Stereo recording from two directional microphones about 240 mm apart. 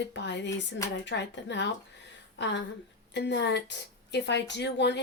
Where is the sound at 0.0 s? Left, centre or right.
Left.